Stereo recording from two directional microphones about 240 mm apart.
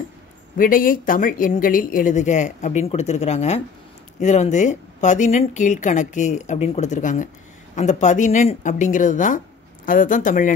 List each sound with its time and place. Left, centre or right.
0.6 s speech: left